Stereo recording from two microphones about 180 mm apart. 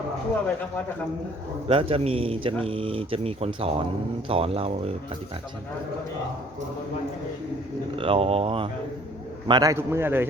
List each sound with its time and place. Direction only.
1.6 s speech: 30° right (ahead or behind)
7.9 s a man's voice: 30° right (ahead or behind); by 10.2 s 10° right (ahead or behind)